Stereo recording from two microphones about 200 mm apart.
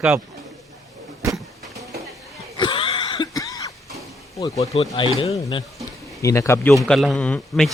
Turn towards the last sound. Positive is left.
turn(degrees=5)  # may be behind; listen again after turning